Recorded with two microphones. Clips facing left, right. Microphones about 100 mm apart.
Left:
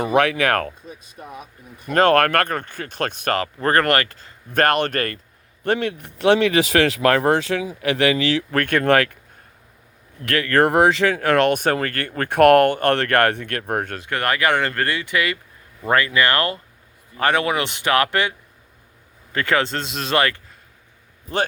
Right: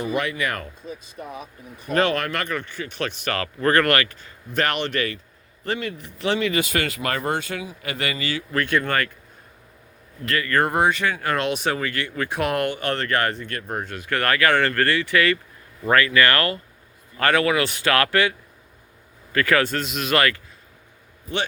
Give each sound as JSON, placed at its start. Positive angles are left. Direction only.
{"t": 0.0, "sound": "speech", "side_deg": 70}
{"t": 1.9, "sound": "speech", "side_deg": 50}
{"t": 3.3, "sound": "speech", "side_deg": 30}
{"t": 4.5, "sound": "speech", "side_deg": 45}
{"t": 5.6, "sound": "speech", "side_deg": 65}
{"t": 8.6, "sound": "speech", "side_deg": 55}
{"t": 8.9, "sound": "speech", "side_deg": 70}
{"t": 10.2, "sound": "speech", "side_deg": 75}
{"t": 14.0, "sound": "speech", "side_deg": 20}